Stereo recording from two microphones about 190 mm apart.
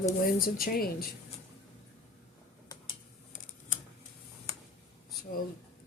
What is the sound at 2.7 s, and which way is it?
Tick-tock, 20° left (ahead or behind).